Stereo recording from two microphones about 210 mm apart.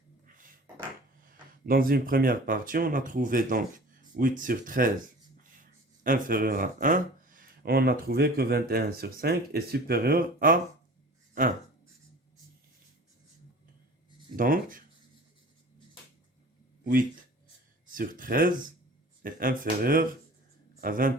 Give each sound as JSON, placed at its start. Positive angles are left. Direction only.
{"t": 1.2, "sound": "speech", "side_deg": -40}
{"t": 14.3, "sound": "speech", "side_deg": -40}
{"t": 16.8, "sound": "speech", "side_deg": -40}